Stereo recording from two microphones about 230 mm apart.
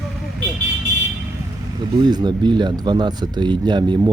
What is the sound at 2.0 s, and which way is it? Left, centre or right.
Speech, centre.